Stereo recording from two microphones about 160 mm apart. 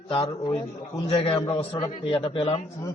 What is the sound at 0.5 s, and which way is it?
Speech, 20° left (ahead or behind).